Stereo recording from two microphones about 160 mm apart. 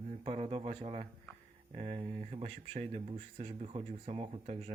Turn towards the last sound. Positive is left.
turn(degrees=-40)  # may be behind; listen again after turning